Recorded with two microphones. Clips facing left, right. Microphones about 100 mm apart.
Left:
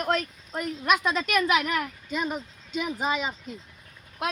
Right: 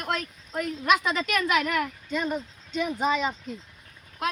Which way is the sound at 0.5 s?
Centre (ahead or behind).